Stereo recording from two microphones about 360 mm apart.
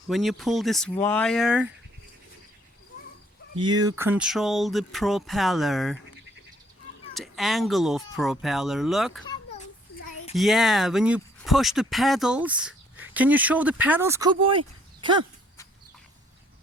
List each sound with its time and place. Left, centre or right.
0.1 s speech: centre
3.6 s speech: centre
7.1 s speech: centre
9.2 s children playing: centre
10.3 s speech: centre
15.0 s a sound: centre